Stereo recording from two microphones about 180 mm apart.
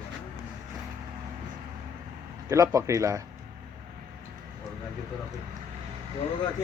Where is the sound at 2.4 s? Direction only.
20° right (ahead or behind).